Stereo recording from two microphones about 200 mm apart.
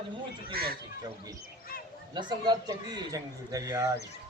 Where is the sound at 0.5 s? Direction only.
50° right (ahead or behind).